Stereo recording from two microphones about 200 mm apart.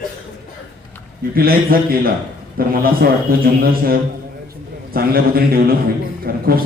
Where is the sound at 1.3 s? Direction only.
50° right (ahead or behind).